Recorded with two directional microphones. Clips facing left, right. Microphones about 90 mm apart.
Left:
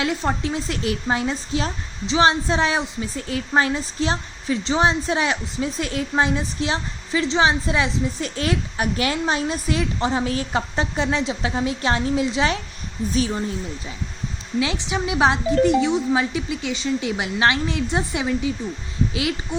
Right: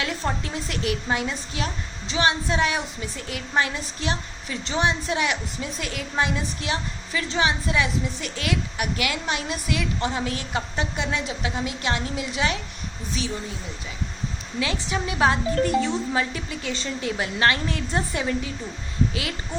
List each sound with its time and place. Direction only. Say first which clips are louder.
0.0 s a woman's voice: left 5 dB; 20° left (ahead or behind)
14.6 s speech: left 2 dB; 20° left (ahead or behind)